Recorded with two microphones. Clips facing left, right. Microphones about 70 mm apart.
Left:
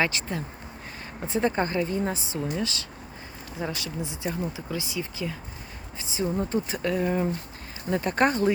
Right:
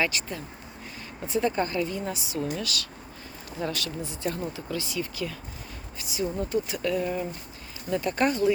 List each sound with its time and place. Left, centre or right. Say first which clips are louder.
0.0 s speech: left 2 dB; left